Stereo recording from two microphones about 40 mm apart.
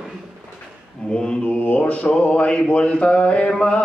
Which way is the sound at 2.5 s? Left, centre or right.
Left.